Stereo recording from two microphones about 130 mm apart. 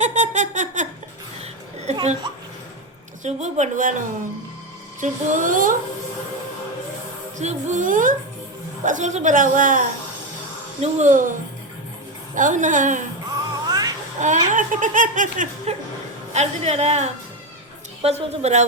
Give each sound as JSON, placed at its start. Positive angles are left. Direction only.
{"t": 0.0, "sound": "a sound", "side_deg": -65}
{"t": 1.9, "sound": "a sound", "side_deg": -60}
{"t": 3.2, "sound": "a woman's voice", "side_deg": -65}
{"t": 7.3, "sound": "a woman's voice", "side_deg": -70}
{"t": 8.8, "sound": "speech", "side_deg": -75}
{"t": 10.8, "sound": "a woman's voice", "side_deg": -65}
{"t": 13.7, "sound": "music", "side_deg": -30}
{"t": 14.2, "sound": "speech", "side_deg": -75}
{"t": 16.3, "sound": "a woman's voice", "side_deg": -55}